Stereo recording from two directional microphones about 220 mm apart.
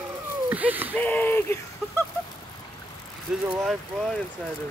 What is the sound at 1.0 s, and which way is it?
Speech, 5° left (ahead or behind).